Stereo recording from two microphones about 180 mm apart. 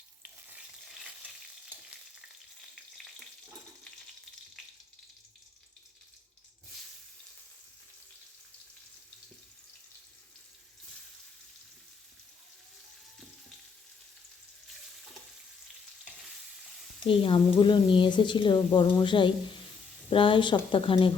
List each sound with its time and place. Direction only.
0.2 s stir: 5° right (ahead or behind)
17.1 s a woman's voice: 30° left (ahead or behind)